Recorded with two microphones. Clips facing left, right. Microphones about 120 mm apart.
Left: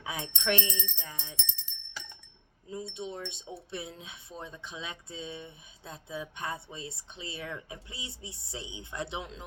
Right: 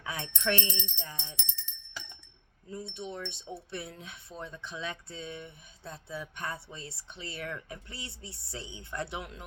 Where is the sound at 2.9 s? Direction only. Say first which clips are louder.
Left 1 dB; 20° left (ahead or behind).